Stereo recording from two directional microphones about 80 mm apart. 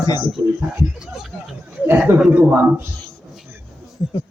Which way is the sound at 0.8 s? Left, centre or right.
Centre.